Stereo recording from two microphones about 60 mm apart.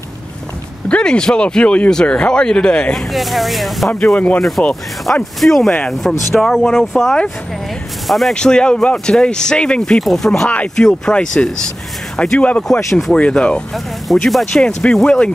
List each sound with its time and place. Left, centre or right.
0.8 s speech: centre
4.0 s speech: centre
8.4 s speech: centre
13.7 s speech: centre
14.6 s speech: centre